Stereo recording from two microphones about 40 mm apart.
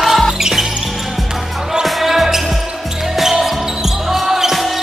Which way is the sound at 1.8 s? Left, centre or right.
Centre.